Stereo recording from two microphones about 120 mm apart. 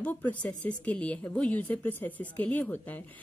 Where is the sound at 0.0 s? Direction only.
15° left (ahead or behind).